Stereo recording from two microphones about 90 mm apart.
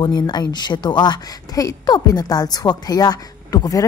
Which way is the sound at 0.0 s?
50° left (ahead or behind).